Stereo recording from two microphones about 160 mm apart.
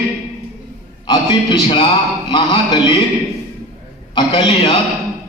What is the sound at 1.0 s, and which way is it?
A man's voice, 30° left (ahead or behind).